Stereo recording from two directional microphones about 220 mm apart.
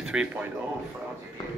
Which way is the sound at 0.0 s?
5° right (ahead or behind).